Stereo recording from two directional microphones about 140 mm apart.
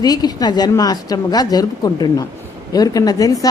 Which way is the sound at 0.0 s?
30° left (ahead or behind).